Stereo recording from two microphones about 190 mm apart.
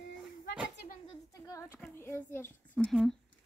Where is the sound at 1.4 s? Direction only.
15° left (ahead or behind).